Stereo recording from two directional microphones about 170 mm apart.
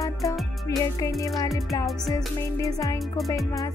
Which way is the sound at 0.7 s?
15° left (ahead or behind).